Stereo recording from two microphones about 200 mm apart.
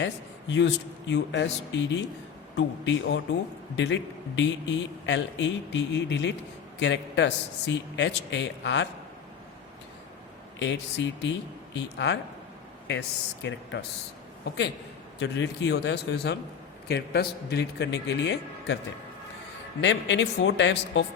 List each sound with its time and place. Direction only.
0.0 s a man's voice: 65° left (ahead or behind)
10.6 s a man's voice: 65° left (ahead or behind)
15.2 s a man's voice: 60° left (ahead or behind)
19.8 s a man's voice: 60° left (ahead or behind)